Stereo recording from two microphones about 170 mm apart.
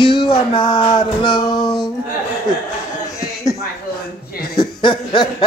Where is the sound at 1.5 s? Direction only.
5° left (ahead or behind).